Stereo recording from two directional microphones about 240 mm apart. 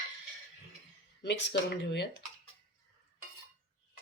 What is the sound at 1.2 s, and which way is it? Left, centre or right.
Speech, left.